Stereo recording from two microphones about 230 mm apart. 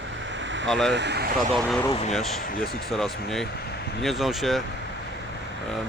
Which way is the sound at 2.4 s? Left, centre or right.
Left.